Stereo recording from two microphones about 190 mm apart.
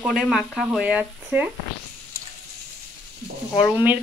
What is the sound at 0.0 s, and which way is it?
Speech, centre (ahead or behind).